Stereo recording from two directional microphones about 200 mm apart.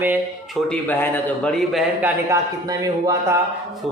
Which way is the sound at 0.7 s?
5° left (ahead or behind).